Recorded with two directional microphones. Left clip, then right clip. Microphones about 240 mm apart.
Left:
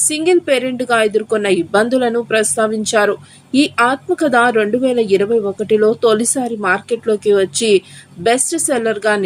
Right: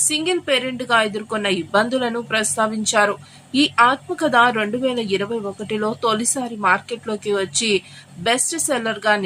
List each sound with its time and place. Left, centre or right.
0.0 s a woman's voice: centre